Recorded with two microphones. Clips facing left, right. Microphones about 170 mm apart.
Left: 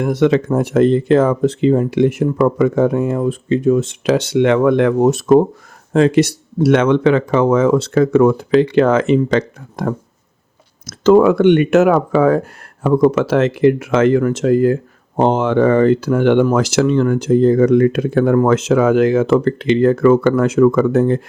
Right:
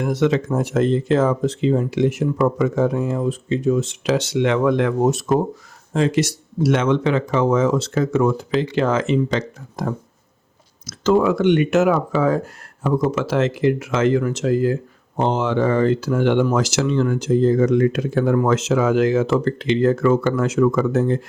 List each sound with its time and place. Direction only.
0.0 s speech: 60° left (ahead or behind)